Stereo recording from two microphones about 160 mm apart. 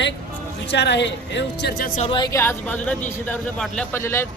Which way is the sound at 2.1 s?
30° left (ahead or behind).